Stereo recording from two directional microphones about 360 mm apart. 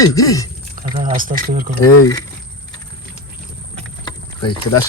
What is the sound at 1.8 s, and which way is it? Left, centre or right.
Speech, left.